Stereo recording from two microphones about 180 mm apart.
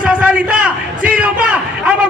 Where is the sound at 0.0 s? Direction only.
5° right (ahead or behind).